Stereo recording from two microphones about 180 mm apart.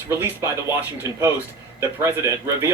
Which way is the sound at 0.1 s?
10° right (ahead or behind).